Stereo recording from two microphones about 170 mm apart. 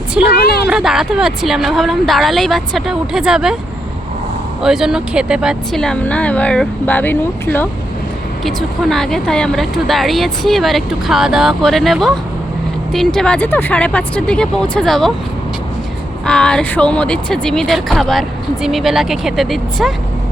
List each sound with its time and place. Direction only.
0.3 s a woman's voice: 70° left (ahead or behind)
0.7 s speech: 5° right (ahead or behind)
4.6 s speech: 5° right (ahead or behind)
8.4 s speech: centre (ahead or behind)
16.2 s speech: 5° left (ahead or behind)